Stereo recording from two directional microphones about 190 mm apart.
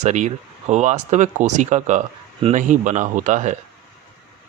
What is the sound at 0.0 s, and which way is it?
Speech, 40° right (ahead or behind).